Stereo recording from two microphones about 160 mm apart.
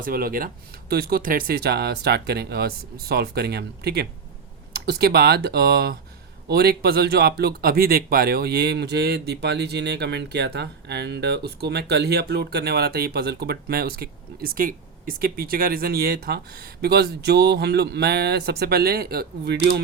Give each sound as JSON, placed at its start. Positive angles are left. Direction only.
{"t": 0.0, "sound": "speech", "side_deg": -65}